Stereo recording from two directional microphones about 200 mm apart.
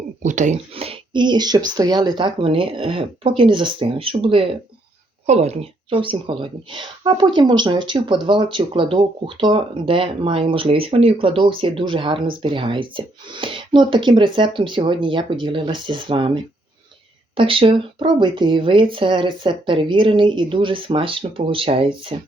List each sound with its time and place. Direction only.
0.2 s speech: 40° right (ahead or behind)